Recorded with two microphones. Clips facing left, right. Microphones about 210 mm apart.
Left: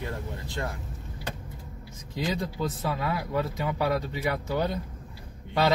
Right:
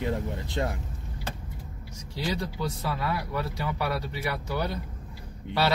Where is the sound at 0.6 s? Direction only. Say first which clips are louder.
Right 4 dB; 20° right (ahead or behind).